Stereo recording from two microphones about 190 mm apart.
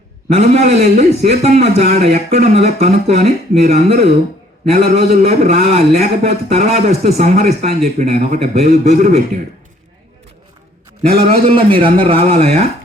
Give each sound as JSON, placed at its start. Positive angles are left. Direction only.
{"t": 0.3, "sound": "a man's voice", "side_deg": -35}
{"t": 11.2, "sound": "a man's voice", "side_deg": -30}